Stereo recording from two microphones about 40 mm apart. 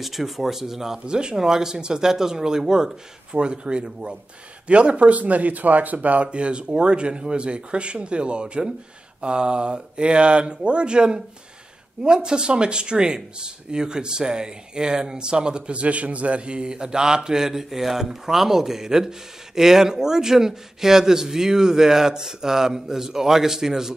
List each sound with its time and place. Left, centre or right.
0.0 s speech: centre
1.0 s speech: right